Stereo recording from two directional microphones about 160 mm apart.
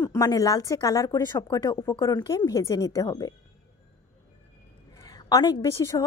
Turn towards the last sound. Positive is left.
turn(degrees=20)  # may be behind; listen again after turning